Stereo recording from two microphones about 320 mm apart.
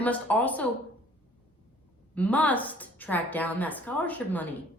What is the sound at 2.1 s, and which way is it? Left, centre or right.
A woman's voice, centre.